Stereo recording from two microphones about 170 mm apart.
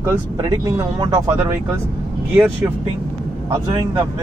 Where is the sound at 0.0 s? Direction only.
15° right (ahead or behind).